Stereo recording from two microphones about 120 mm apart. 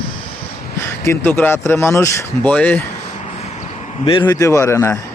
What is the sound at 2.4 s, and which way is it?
Speech, 15° left (ahead or behind).